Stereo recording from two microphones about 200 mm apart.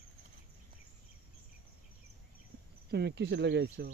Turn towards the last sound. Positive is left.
turn(degrees=-55)  # may be behind; listen again after turning